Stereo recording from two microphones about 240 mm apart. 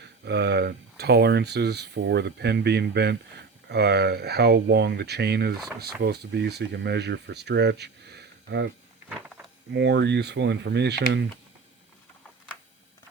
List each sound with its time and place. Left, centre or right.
0.3 s speech: right
9.7 s speech: right